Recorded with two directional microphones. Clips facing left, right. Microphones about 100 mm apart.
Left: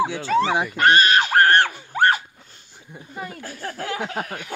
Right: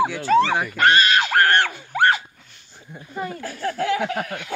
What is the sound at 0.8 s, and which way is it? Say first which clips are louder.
Screaming: left 1 dB; 40° left (ahead or behind).